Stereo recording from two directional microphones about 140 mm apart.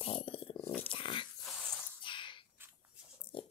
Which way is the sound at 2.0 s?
35° left (ahead or behind).